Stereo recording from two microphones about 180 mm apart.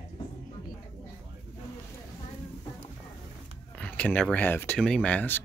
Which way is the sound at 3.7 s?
10° left (ahead or behind).